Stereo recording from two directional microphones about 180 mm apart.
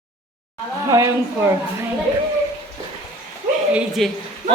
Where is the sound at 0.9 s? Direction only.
15° right (ahead or behind).